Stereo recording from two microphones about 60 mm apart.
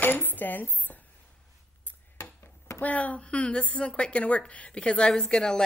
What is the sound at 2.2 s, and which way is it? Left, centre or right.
Chopping, left.